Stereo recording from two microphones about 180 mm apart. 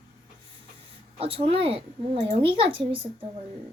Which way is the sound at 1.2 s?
30° right (ahead or behind).